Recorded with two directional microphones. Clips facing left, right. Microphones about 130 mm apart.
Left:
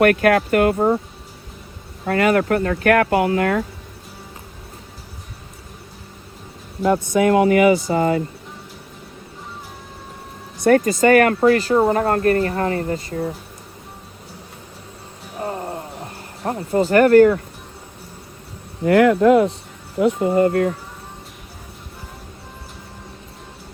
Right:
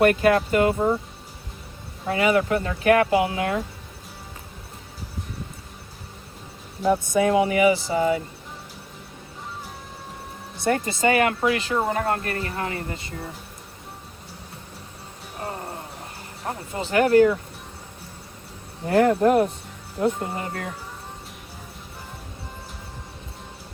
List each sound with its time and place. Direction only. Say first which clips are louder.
0.0 s speech: left 3 dB; 60° left (ahead or behind)
2.0 s speech: left 4 dB; 55° left (ahead or behind)
6.8 s speech: left 4 dB; 80° left; by 8.1 s 55° left (ahead or behind)
10.6 s speech: left 8 dB; 55° left (ahead or behind)
15.4 s music: left 6 dB; 20° left (ahead or behind)
16.4 s speech: left 11 dB; 45° left (ahead or behind)
18.9 s speech: left 5 dB; 90° left
20.0 s speech: left 9 dB; 60° left (ahead or behind)